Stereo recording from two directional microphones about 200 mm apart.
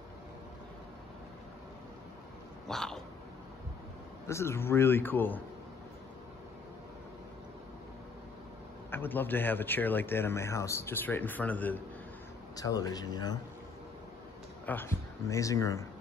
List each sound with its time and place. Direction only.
2.7 s dog: centre (ahead or behind)
4.3 s a man's voice: 15° left (ahead or behind)
8.9 s a man's voice: 10° left (ahead or behind)
14.7 s speech: 10° left (ahead or behind)